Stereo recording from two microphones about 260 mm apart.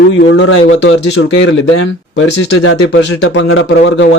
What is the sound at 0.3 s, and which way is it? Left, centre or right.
Speech, left.